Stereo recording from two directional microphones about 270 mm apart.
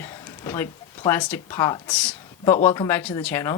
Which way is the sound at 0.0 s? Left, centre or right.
Centre.